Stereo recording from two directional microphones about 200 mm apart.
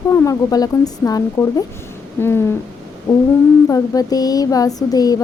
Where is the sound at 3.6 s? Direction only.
15° left (ahead or behind).